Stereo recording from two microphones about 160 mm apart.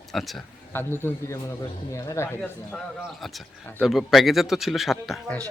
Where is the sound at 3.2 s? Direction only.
Centre (ahead or behind).